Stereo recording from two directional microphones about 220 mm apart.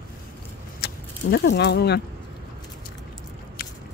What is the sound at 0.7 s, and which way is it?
Keys jangling, 50° left (ahead or behind).